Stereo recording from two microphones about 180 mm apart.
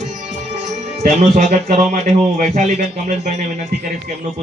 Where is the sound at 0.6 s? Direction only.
40° right (ahead or behind).